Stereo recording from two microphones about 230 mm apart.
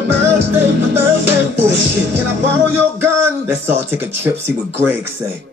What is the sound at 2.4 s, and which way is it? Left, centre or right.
Speech, centre.